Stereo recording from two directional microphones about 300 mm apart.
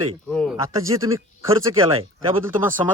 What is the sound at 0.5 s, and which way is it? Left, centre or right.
A man's voice, centre.